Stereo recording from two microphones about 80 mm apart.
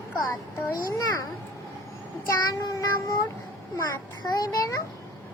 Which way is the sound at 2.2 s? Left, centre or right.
Left.